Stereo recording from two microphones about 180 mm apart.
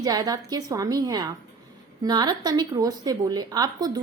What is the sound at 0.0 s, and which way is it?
Speech, 20° right (ahead or behind).